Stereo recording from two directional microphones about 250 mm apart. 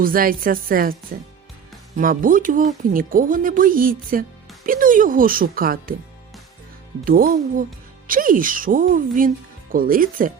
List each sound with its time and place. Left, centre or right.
0.0 s speech: right
2.0 s speech: right
7.0 s speech: right